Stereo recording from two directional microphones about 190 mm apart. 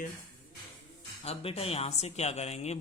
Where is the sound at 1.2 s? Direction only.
30° left (ahead or behind).